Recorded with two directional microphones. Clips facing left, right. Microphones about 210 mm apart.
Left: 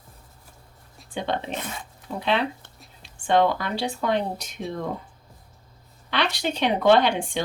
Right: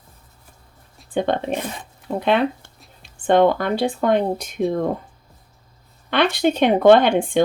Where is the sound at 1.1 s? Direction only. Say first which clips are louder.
Right 7 dB; 50° right (ahead or behind).